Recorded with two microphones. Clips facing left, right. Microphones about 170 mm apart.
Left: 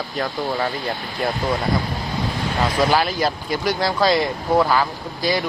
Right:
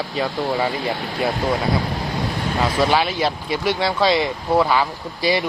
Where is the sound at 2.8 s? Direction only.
Centre (ahead or behind).